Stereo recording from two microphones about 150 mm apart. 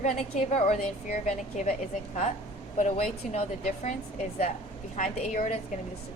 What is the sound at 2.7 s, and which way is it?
A woman's voice, 55° left (ahead or behind).